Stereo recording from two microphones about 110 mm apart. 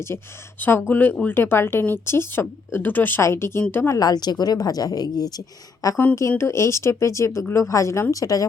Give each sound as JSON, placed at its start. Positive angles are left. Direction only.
{"t": 0.6, "sound": "speech", "side_deg": 15}
{"t": 3.9, "sound": "a woman's voice", "side_deg": 35}